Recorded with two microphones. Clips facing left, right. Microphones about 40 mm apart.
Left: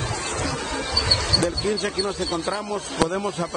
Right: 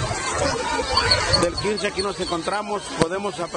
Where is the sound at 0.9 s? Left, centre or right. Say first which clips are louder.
Right 3 dB; right.